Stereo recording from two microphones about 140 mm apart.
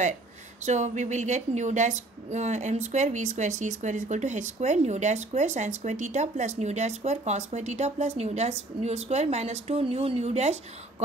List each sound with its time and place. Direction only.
0.7 s a woman's voice: 55° right (ahead or behind)